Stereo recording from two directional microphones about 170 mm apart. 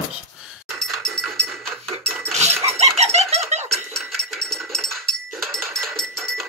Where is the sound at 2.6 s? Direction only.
40° right (ahead or behind).